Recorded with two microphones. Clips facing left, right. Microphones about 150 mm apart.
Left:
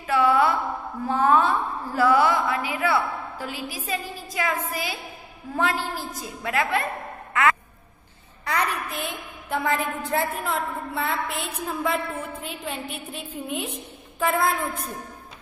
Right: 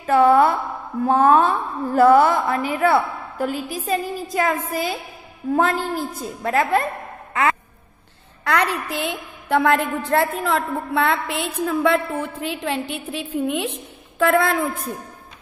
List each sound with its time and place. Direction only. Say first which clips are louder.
0.0 s a sound: right 6 dB; 50° right (ahead or behind)
1.0 s a woman's voice: right 5 dB; 50° right (ahead or behind)
8.5 s a woman's voice: right 5 dB; 80° right